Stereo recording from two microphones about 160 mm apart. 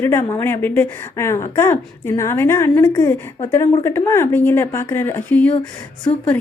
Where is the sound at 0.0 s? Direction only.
15° left (ahead or behind).